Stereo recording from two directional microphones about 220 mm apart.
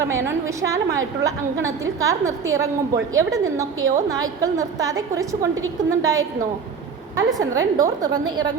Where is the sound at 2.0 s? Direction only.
15° right (ahead or behind).